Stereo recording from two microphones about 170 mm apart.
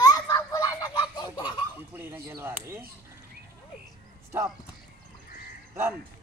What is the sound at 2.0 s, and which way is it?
Speech, 15° right (ahead or behind).